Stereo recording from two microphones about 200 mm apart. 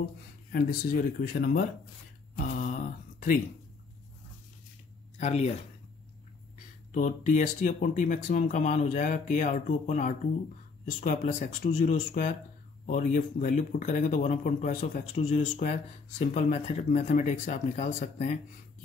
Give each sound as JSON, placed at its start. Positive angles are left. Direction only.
{"t": 0.5, "sound": "speech", "side_deg": 50}
{"t": 2.3, "sound": "speech", "side_deg": 45}
{"t": 5.2, "sound": "speech", "side_deg": 35}
{"t": 6.9, "sound": "speech", "side_deg": 35}